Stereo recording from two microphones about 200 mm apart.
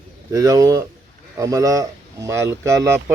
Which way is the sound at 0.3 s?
15° right (ahead or behind).